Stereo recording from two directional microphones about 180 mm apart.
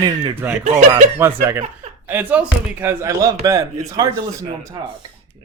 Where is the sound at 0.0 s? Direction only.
25° right (ahead or behind).